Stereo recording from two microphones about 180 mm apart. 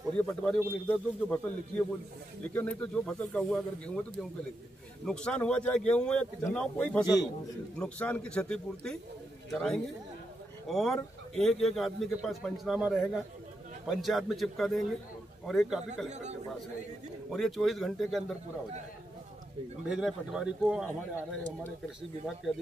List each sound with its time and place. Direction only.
0.2 s a man's voice: 5° left (ahead or behind)
16.1 s speech: 40° right (ahead or behind)
17.3 s a man's voice: centre (ahead or behind)
19.9 s a man's voice: 5° right (ahead or behind)